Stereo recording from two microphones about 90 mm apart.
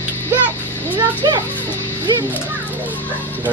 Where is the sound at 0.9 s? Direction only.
50° right (ahead or behind).